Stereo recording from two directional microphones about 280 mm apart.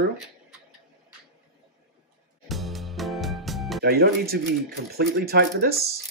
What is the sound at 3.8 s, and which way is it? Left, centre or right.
Speech, right.